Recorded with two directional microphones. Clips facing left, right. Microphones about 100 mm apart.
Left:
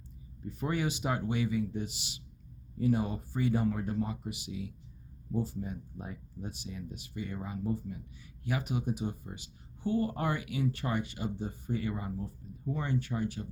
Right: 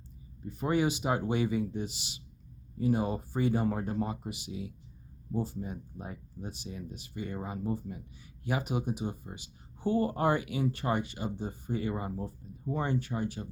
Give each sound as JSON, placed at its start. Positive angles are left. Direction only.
{"t": 0.5, "sound": "speech", "side_deg": -20}
{"t": 9.7, "sound": "speech", "side_deg": -30}